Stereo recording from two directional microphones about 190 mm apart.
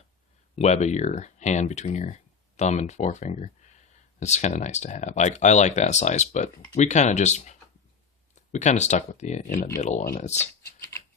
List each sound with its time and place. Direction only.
0.5 s speech: 35° left (ahead or behind)
10.4 s typing: 15° left (ahead or behind)